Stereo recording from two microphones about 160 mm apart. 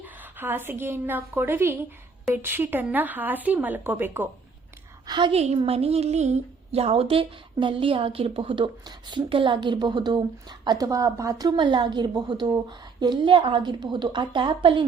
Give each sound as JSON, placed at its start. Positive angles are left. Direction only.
{"t": 0.3, "sound": "a woman's voice", "side_deg": -15}
{"t": 5.0, "sound": "a woman's voice", "side_deg": -30}
{"t": 5.4, "sound": "a woman's voice", "side_deg": -40}